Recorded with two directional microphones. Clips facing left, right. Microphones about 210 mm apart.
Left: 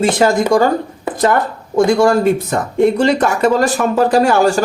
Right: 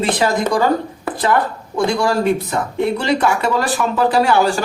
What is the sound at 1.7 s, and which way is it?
Speech, 45° left (ahead or behind).